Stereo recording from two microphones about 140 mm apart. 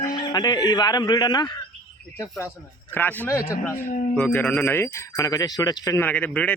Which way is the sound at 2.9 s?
15° left (ahead or behind).